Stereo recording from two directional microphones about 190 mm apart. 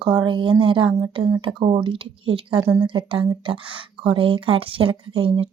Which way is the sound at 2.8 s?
25° right (ahead or behind).